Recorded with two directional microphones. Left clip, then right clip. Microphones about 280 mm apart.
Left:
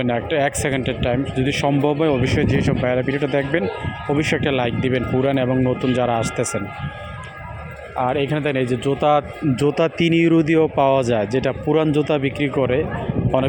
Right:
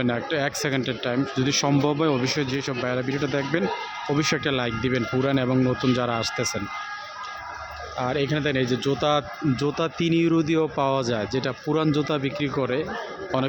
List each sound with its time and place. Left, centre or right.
0.0 s speech: centre
7.9 s speech: centre
8.6 s speech: centre
8.9 s speech: centre
9.6 s speech: centre